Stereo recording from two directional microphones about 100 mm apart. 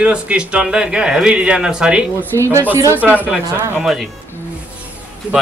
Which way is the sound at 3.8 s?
Centre (ahead or behind).